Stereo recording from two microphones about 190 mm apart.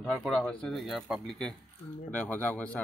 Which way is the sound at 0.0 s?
Centre (ahead or behind).